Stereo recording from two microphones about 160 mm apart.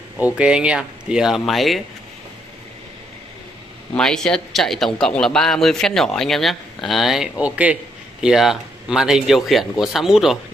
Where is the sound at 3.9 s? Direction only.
5° left (ahead or behind).